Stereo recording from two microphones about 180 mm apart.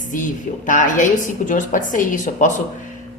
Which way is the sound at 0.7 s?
45° left (ahead or behind).